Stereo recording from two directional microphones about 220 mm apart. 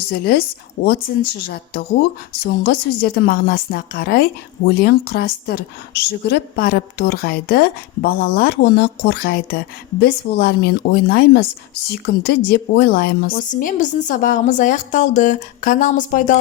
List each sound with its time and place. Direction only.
0.1 s a woman's voice: 45° left (ahead or behind)